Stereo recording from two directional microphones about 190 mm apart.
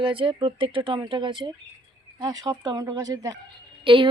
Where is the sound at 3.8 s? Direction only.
25° right (ahead or behind).